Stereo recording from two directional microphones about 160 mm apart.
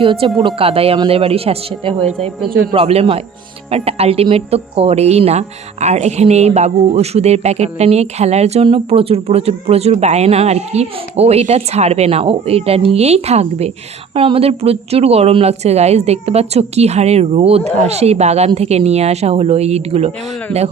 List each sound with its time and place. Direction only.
0.0 s speech: 35° right (ahead or behind)